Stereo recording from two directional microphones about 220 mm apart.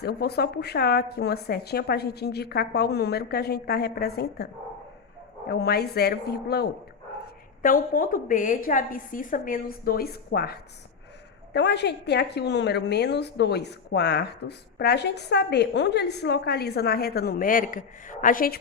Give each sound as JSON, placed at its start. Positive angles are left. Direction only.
{"t": 0.0, "sound": "a woman's voice", "side_deg": 45}
{"t": 5.5, "sound": "a woman's voice", "side_deg": 45}